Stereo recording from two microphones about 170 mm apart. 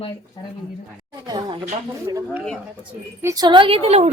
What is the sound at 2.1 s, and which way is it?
A woman's voice, 25° right (ahead or behind).